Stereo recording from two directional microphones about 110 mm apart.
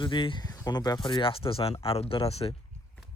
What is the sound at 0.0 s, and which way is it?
Speech, 45° left (ahead or behind).